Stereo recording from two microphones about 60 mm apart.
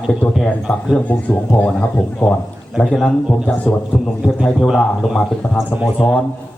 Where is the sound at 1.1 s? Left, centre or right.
Left.